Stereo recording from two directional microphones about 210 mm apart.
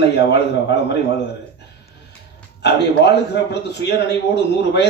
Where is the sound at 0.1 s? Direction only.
55° left (ahead or behind).